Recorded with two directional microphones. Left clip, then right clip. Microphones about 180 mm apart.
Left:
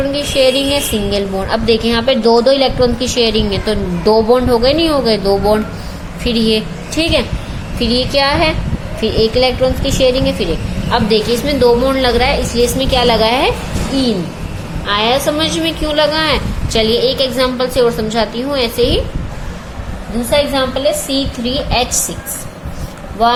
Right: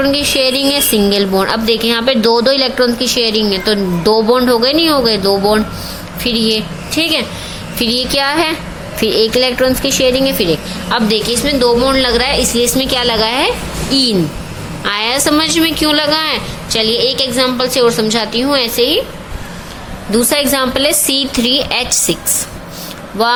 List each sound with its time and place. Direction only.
0.0 s a woman's voice: 15° right (ahead or behind)
14.8 s a woman's voice: 20° right (ahead or behind)
20.3 s a woman's voice: 40° right (ahead or behind); by 22.0 s 25° right (ahead or behind)